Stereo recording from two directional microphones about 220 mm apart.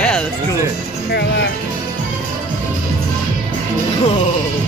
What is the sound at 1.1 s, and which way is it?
Music, 50° left (ahead or behind).